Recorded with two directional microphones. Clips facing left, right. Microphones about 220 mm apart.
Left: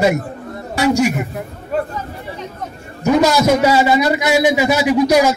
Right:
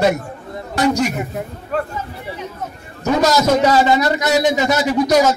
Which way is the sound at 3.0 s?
10° left (ahead or behind).